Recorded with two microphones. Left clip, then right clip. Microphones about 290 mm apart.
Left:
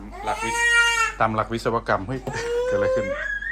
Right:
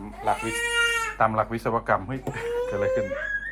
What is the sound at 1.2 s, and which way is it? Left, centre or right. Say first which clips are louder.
Speech: left 1 dB; centre.